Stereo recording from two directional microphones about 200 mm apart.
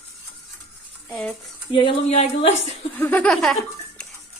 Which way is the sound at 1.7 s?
25° left (ahead or behind).